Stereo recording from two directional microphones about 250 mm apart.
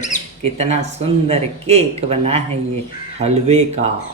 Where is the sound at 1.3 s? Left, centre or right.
Right.